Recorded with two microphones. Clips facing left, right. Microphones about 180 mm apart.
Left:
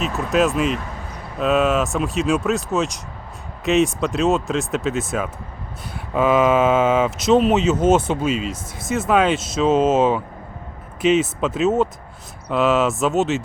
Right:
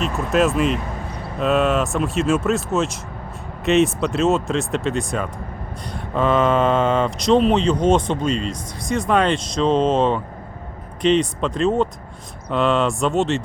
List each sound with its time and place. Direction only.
0.0 s speech: centre (ahead or behind)